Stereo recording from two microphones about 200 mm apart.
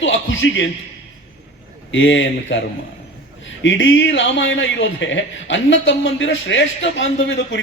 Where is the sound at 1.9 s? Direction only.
70° left (ahead or behind).